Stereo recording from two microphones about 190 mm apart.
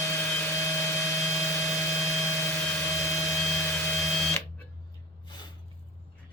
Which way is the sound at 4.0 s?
Centre (ahead or behind).